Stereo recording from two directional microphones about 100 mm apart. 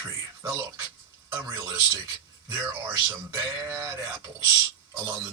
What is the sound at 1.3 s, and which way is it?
Speech, 30° right (ahead or behind).